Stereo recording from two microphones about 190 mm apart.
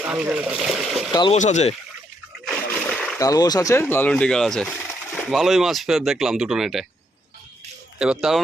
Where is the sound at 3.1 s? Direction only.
20° left (ahead or behind); by 6.8 s centre (ahead or behind).